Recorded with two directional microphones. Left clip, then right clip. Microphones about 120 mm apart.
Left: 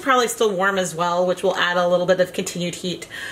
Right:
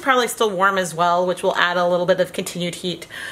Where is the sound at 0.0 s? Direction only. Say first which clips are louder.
Even; 35° right (ahead or behind).